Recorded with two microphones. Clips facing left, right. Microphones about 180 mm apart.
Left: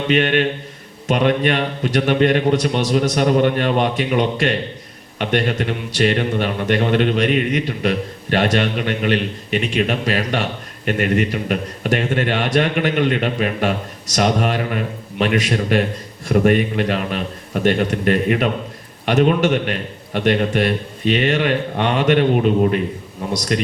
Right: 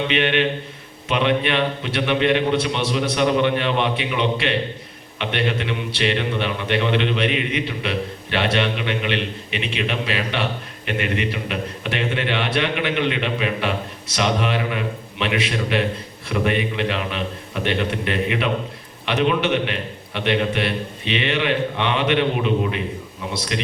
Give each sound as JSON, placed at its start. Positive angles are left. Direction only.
{"t": 0.1, "sound": "a man's voice", "side_deg": 45}